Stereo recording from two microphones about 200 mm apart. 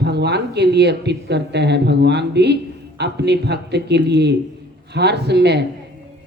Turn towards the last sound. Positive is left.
turn(degrees=-55)  # may be behind; listen again after turning